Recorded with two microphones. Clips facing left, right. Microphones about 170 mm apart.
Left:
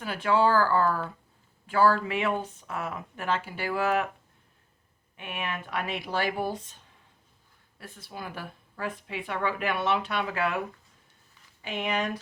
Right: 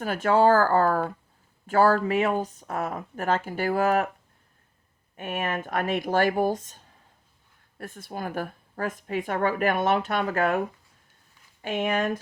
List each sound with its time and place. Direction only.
0.0 s speech: 45° right (ahead or behind)
5.1 s speech: 45° right (ahead or behind)
11.6 s speech: 50° right (ahead or behind)